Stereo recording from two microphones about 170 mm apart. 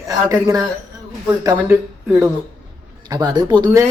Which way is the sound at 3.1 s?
25° right (ahead or behind).